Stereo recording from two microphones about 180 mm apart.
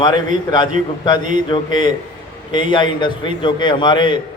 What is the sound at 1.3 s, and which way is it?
A man's voice, 25° left (ahead or behind).